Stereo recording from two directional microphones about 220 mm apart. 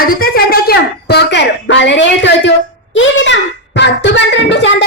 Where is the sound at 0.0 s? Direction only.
40° left (ahead or behind).